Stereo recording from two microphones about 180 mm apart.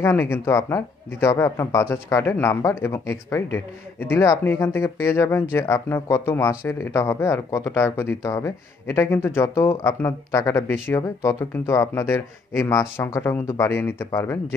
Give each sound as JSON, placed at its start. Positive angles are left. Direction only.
{"t": 0.0, "sound": "speech", "side_deg": 15}